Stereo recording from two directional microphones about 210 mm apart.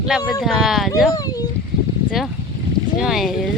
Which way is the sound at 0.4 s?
Centre (ahead or behind).